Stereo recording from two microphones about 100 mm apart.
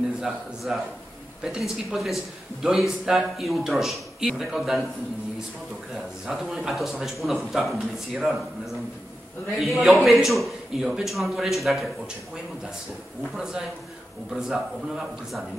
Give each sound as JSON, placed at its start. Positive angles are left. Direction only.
{"t": 0.7, "sound": "a man's voice", "side_deg": -5}
{"t": 6.2, "sound": "a man's voice", "side_deg": 0}
{"t": 9.6, "sound": "a man's voice", "side_deg": 0}
{"t": 14.3, "sound": "a man's voice", "side_deg": -5}